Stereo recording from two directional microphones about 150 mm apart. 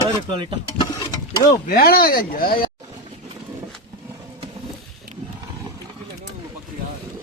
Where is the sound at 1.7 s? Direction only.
85° left.